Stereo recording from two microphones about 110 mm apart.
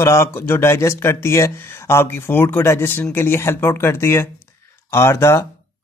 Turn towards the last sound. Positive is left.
turn(degrees=25)  # may be behind; listen again after turning